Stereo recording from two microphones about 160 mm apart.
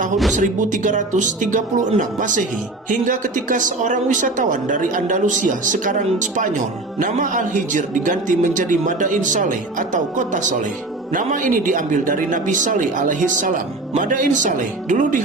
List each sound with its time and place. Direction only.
0.3 s a man's voice: 50° right (ahead or behind)